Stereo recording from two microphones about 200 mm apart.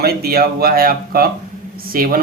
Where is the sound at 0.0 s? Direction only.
50° right (ahead or behind).